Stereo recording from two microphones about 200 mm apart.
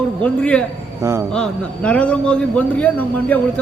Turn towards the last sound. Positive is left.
turn(degrees=10)  # may be behind; listen again after turning